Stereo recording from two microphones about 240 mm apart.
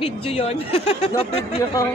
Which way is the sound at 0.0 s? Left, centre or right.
Left.